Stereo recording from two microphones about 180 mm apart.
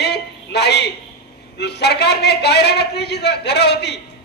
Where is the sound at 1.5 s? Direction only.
70° left (ahead or behind).